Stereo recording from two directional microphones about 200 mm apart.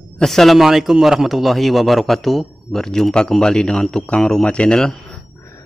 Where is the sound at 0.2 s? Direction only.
Centre (ahead or behind).